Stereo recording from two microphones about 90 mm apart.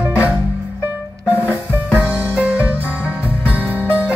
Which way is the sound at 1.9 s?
15° right (ahead or behind).